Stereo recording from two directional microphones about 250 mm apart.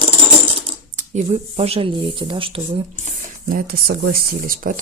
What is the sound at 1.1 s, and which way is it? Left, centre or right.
Speech, right.